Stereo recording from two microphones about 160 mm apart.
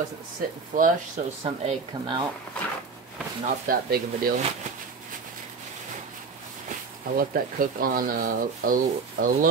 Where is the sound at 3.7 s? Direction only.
65° right (ahead or behind).